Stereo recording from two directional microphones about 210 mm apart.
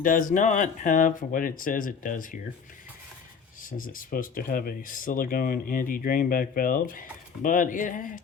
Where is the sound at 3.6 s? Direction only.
40° left (ahead or behind).